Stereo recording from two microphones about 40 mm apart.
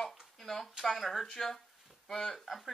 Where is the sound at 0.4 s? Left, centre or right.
Centre.